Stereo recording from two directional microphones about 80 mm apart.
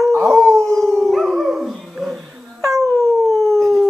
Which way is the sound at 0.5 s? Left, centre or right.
Right.